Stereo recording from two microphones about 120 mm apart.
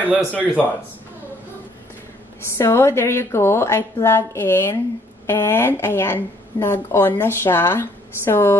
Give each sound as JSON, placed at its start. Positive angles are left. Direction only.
{"t": 0.0, "sound": "speech", "side_deg": -10}
{"t": 2.5, "sound": "speech", "side_deg": 20}